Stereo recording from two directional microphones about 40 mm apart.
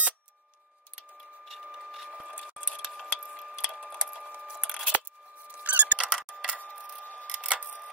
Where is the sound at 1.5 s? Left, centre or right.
Centre.